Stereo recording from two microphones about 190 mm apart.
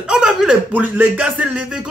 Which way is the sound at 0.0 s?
5° right (ahead or behind).